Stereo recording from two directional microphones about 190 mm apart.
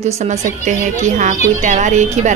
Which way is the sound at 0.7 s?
40° right (ahead or behind).